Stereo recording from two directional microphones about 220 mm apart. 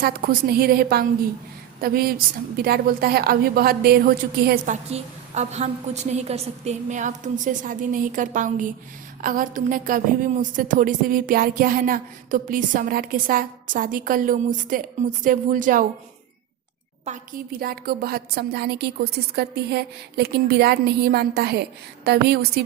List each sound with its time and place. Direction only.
0.0 s a woman's voice: 45° right (ahead or behind)
17.1 s speech: 40° right (ahead or behind)